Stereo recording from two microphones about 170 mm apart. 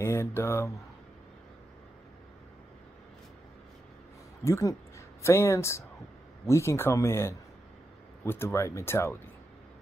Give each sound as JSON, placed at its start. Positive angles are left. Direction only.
{"t": 0.0, "sound": "speech", "side_deg": 15}
{"t": 4.5, "sound": "speech", "side_deg": 15}